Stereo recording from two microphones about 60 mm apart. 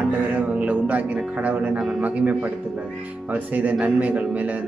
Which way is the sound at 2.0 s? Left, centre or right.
Right.